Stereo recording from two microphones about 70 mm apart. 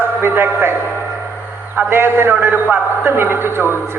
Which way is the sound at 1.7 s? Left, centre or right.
Right.